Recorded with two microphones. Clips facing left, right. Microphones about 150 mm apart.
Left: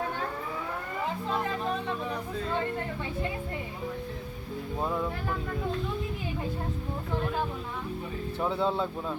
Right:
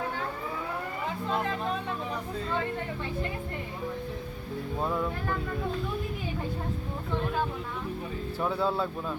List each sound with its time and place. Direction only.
4.8 s speech: 5° left (ahead or behind)
8.4 s speech: 20° left (ahead or behind)